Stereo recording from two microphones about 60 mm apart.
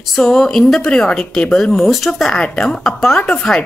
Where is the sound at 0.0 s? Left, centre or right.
Centre.